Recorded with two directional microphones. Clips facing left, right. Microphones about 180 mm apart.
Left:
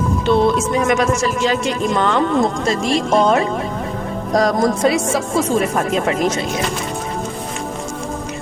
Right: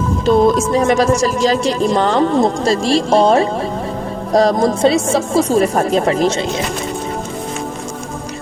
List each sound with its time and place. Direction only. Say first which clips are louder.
0.3 s a woman's voice: right 4 dB; 35° right (ahead or behind)